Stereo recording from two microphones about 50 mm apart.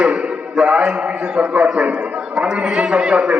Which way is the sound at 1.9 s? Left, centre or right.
Right.